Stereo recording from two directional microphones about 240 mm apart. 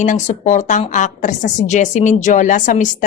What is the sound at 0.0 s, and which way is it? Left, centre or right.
A woman's voice, left.